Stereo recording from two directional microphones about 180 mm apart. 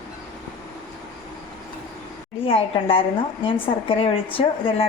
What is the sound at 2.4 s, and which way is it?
A woman's voice, 30° left (ahead or behind).